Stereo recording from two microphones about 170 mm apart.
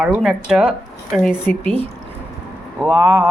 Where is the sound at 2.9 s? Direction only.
25° right (ahead or behind).